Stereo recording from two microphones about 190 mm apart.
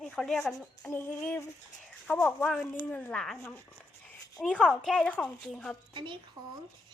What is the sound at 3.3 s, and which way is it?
Female singing, 15° left (ahead or behind).